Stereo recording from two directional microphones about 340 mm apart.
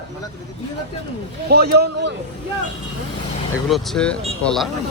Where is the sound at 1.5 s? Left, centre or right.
Right.